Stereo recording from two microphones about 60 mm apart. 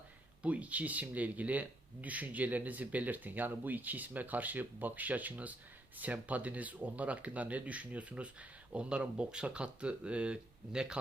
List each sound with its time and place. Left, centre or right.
0.4 s speech: right